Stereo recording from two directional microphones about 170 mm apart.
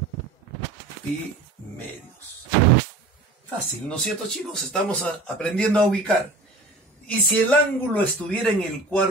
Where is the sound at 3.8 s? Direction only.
5° left (ahead or behind).